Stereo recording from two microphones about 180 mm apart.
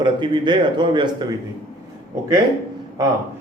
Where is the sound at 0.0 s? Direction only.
25° right (ahead or behind).